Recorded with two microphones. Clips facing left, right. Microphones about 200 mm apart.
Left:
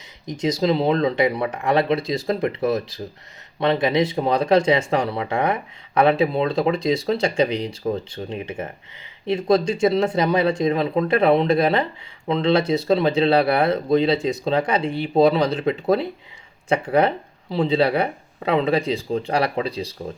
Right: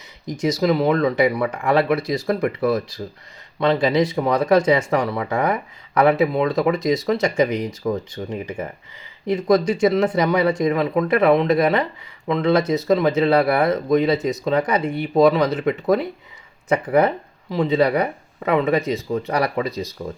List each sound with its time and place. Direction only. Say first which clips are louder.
0.6 s speech: right 1 dB; 25° left (ahead or behind)